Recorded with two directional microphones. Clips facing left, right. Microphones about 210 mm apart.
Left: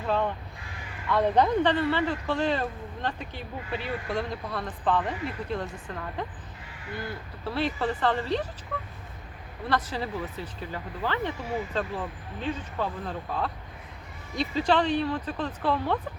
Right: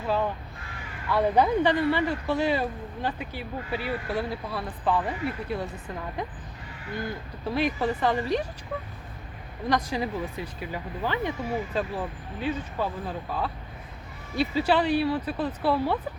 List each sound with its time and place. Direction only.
0.1 s crow: 5° right (ahead or behind)
1.1 s speech: 5° right (ahead or behind)
7.4 s speech: 15° right (ahead or behind)
9.6 s speech: 15° right (ahead or behind)